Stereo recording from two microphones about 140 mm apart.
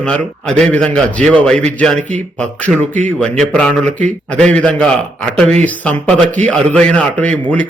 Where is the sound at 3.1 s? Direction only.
10° left (ahead or behind).